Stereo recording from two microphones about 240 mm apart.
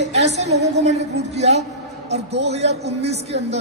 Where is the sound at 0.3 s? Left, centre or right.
Right.